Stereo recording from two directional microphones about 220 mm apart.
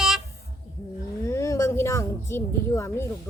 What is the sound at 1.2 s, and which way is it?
A woman's voice, 15° left (ahead or behind).